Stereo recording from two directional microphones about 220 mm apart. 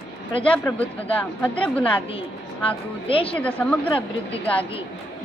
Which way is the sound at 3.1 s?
25° left (ahead or behind).